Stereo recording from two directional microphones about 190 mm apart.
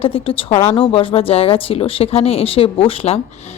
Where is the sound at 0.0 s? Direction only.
30° left (ahead or behind).